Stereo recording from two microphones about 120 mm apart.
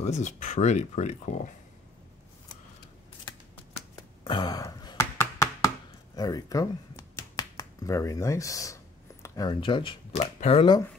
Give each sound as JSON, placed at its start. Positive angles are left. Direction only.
{"t": 0.0, "sound": "speech", "side_deg": 85}
{"t": 3.7, "sound": "finger snapping", "side_deg": 45}
{"t": 5.2, "sound": "chopping", "side_deg": 20}
{"t": 6.1, "sound": "speech", "side_deg": 30}
{"t": 9.2, "sound": "a sound", "side_deg": 25}
{"t": 9.5, "sound": "speech", "side_deg": 45}
{"t": 10.1, "sound": "speech", "side_deg": 70}